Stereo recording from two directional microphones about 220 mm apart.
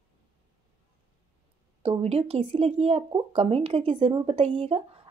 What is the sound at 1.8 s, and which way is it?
Speech, 25° right (ahead or behind).